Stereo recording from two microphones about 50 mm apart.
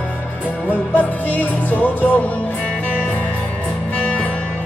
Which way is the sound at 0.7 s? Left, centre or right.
Left.